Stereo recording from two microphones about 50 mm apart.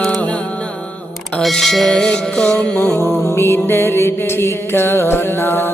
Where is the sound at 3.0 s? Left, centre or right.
Left.